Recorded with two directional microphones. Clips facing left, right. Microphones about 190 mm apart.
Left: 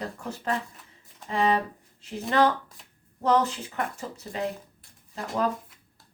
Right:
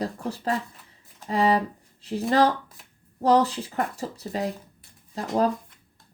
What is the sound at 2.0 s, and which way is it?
Speech, 35° right (ahead or behind).